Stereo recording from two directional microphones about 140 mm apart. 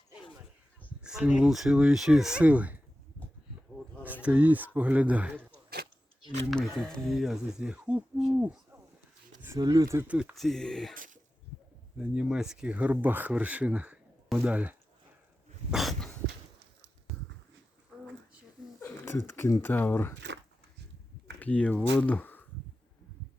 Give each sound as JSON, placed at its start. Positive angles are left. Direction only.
{"t": 1.0, "sound": "speech", "side_deg": -5}
{"t": 4.0, "sound": "speech", "side_deg": -10}
{"t": 6.5, "sound": "speech", "side_deg": 5}
{"t": 9.6, "sound": "speech", "side_deg": -30}
{"t": 10.3, "sound": "speech", "side_deg": 0}
{"t": 10.9, "sound": "speech", "side_deg": -75}
{"t": 11.9, "sound": "speech", "side_deg": -5}
{"t": 15.7, "sound": "dog", "side_deg": 0}
{"t": 18.8, "sound": "a sound", "side_deg": 20}
{"t": 19.3, "sound": "speech", "side_deg": 20}
{"t": 21.3, "sound": "speech", "side_deg": 10}